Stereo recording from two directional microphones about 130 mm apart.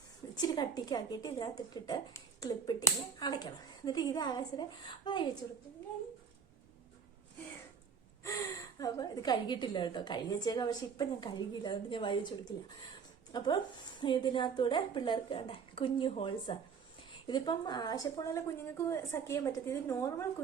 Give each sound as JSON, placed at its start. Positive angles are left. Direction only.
{"t": 0.3, "sound": "a woman's voice", "side_deg": 35}
{"t": 8.2, "sound": "a woman's voice", "side_deg": 25}